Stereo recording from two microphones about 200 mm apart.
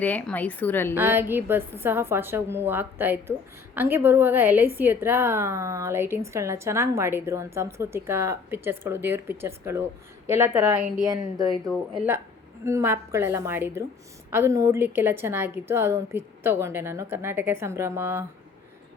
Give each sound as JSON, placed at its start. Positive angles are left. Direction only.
{"t": 0.0, "sound": "a woman's voice", "side_deg": 5}
{"t": 0.9, "sound": "a woman's voice", "side_deg": -10}
{"t": 11.6, "sound": "speech", "side_deg": 0}
{"t": 12.6, "sound": "a woman's voice", "side_deg": -15}